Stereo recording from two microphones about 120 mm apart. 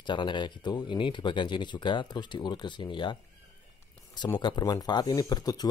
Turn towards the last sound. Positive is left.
turn(degrees=35)  # may be behind; listen again after turning